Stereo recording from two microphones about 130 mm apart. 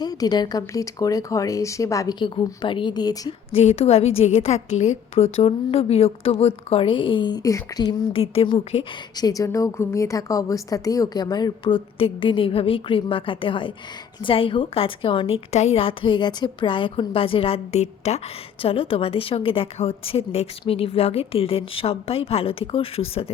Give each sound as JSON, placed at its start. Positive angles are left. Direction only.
{"t": 0.0, "sound": "speech", "side_deg": 30}
{"t": 3.5, "sound": "a woman's voice", "side_deg": 55}
{"t": 8.2, "sound": "a woman's voice", "side_deg": 45}
{"t": 9.1, "sound": "a woman's voice", "side_deg": 30}
{"t": 15.5, "sound": "a woman's voice", "side_deg": 50}
{"t": 18.6, "sound": "a woman's voice", "side_deg": 45}